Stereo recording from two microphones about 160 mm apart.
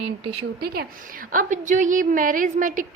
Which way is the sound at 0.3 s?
85° right.